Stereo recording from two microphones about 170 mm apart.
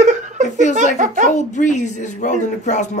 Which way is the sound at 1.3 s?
45° left (ahead or behind).